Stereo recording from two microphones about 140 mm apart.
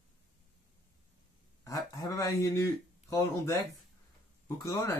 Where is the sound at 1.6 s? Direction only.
25° left (ahead or behind).